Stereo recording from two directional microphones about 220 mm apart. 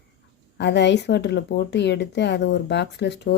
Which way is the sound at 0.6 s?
50° left (ahead or behind).